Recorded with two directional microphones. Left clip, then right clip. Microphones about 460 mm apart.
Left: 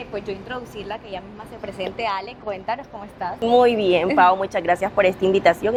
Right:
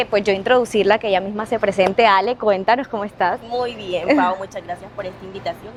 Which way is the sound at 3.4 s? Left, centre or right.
Left.